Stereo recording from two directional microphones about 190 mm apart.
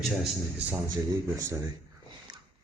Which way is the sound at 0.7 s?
15° right (ahead or behind).